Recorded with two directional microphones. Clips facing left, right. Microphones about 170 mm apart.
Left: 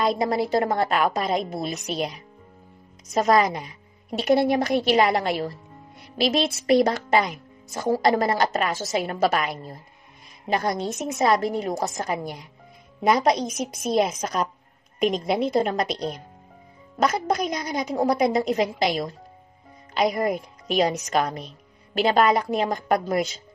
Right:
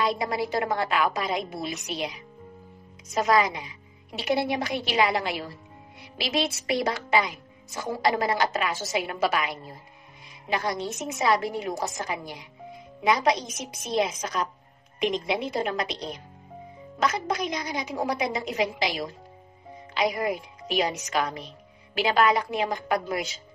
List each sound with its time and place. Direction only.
0.0 s a woman's voice: 40° left (ahead or behind)
3.2 s a woman's voice: 40° left (ahead or behind)
17.0 s a woman's voice: 40° left (ahead or behind)